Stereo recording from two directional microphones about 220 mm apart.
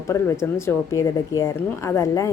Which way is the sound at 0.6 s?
15° left (ahead or behind).